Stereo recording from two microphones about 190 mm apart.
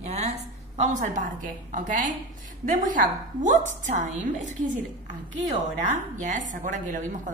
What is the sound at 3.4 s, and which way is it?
A woman's voice, 40° right (ahead or behind).